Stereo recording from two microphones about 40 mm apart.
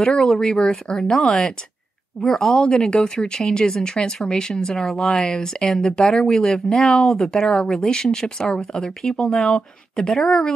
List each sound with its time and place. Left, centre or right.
0.0 s speech: centre
5.0 s speech: centre
5.3 s speech: centre